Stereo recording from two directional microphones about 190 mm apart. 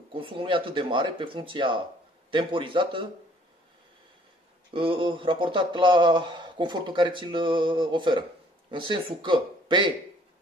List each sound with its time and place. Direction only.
0.1 s speech: 30° right (ahead or behind)
4.6 s speech: 25° right (ahead or behind)